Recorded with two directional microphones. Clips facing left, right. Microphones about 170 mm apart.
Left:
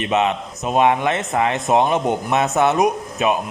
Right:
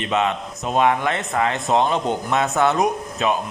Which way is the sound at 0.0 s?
20° left (ahead or behind).